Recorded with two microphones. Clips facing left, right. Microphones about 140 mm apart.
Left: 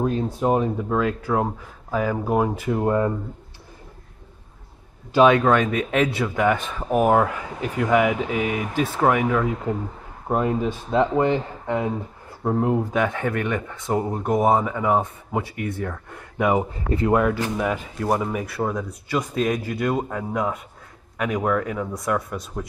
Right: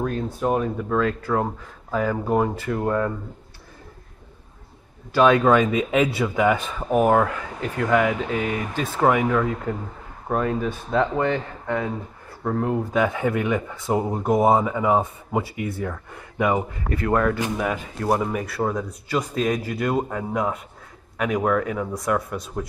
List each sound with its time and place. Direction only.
0.4 s speech: 15° left (ahead or behind)
5.3 s speech: 5° right (ahead or behind)
10.2 s speech: 15° left (ahead or behind)
12.9 s speech: 5° right (ahead or behind)
16.7 s speech: 25° left (ahead or behind)
17.1 s speech: 10° left (ahead or behind)
18.0 s speech: 5° right (ahead or behind)